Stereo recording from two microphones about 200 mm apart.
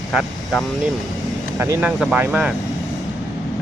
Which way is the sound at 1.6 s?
10° right (ahead or behind).